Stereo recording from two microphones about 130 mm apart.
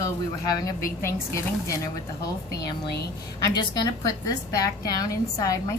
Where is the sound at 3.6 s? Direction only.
30° left (ahead or behind).